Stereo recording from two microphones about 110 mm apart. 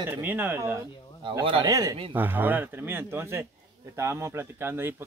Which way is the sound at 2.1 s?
15° right (ahead or behind).